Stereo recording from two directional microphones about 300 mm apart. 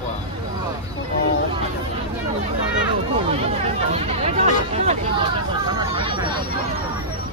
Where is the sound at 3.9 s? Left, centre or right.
Right.